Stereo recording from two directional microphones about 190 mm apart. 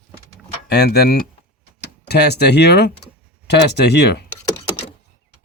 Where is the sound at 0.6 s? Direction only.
60° left (ahead or behind).